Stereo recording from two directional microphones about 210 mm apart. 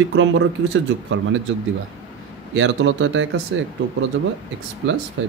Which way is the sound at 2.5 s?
60° right (ahead or behind).